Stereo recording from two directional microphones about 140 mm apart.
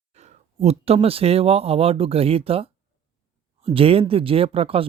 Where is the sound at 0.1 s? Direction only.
50° right (ahead or behind).